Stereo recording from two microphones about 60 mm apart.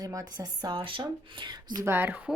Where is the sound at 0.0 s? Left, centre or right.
Right.